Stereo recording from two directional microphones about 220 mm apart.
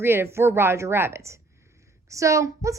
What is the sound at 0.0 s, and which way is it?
A woman's voice, 10° right (ahead or behind).